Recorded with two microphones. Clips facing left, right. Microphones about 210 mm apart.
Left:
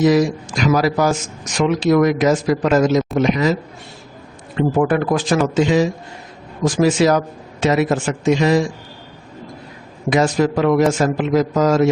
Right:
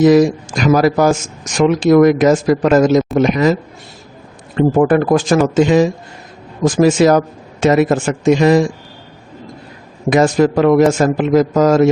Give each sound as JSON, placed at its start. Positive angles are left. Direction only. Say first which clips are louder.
{"t": 0.0, "sound": "a man's voice", "louder": "right 5 dB", "side_deg": -50}
{"t": 4.5, "sound": "a man's voice", "louder": "right 5 dB", "side_deg": -45}
{"t": 10.1, "sound": "a man's voice", "louder": "right 4 dB", "side_deg": -50}